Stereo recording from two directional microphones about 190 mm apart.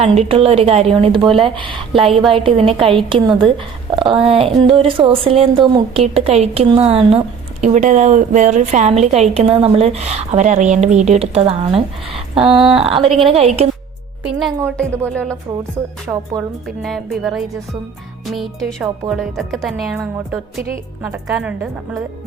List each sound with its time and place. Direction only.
0.0 s a woman's voice: 30° right (ahead or behind)
14.3 s speech: centre (ahead or behind)
16.1 s a woman's voice: 15° right (ahead or behind)
16.6 s speech: centre (ahead or behind)
18.3 s speech: centre (ahead or behind)
21.0 s a woman's voice: 10° right (ahead or behind)